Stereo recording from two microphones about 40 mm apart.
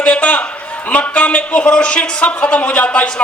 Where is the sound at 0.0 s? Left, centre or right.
Left.